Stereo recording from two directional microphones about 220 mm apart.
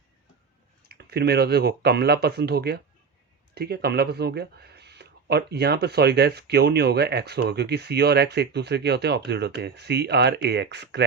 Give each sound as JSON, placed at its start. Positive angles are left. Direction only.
{"t": 0.9, "sound": "speech", "side_deg": -45}